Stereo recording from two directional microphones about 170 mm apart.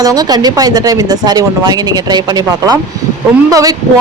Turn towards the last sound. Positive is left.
turn(degrees=-20)  # may be behind; listen again after turning